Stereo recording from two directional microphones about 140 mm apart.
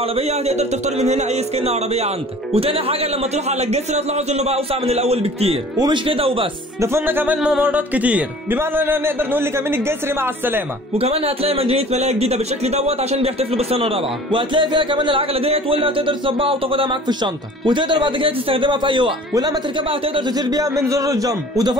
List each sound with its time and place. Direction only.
0.0 s a man's voice: 45° right (ahead or behind)
6.8 s music: 20° right (ahead or behind)
11.0 s a man's voice: 45° right (ahead or behind); by 21.7 s 25° right (ahead or behind)